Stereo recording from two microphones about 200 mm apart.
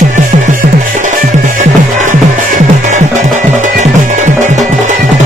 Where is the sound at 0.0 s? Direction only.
35° right (ahead or behind).